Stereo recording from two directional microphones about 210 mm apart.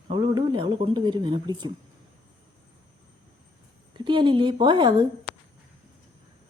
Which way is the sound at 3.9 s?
20° right (ahead or behind).